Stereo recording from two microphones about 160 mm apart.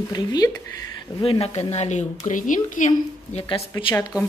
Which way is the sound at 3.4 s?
35° left (ahead or behind).